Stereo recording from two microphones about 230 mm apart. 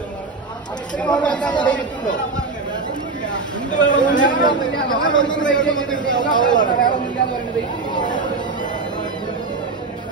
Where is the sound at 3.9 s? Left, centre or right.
Left.